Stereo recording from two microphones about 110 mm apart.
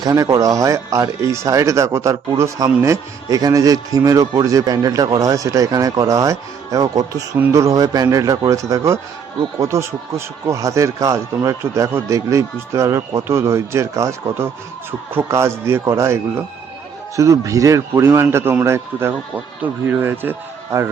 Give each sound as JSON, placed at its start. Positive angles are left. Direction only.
{"t": 0.0, "sound": "speech", "side_deg": -30}